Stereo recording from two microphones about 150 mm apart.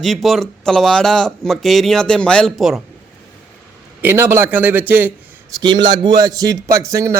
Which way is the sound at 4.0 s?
15° right (ahead or behind).